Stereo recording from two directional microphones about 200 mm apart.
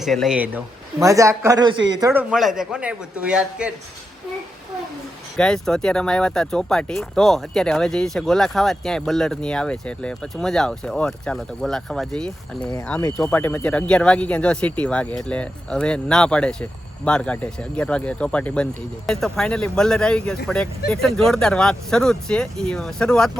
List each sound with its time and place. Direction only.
0.0 s speech: centre (ahead or behind); by 1.7 s 20° right (ahead or behind)
1.7 s speech: 65° right (ahead or behind)
2.0 s speech: 15° right (ahead or behind)
2.3 s speech: centre (ahead or behind)
5.4 s speech: 5° left (ahead or behind)